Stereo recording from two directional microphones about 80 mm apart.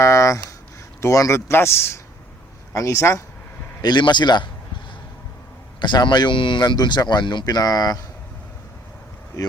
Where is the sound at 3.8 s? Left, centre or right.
Left.